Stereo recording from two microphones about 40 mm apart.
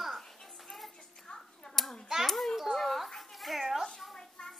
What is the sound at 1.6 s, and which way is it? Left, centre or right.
Hands, centre.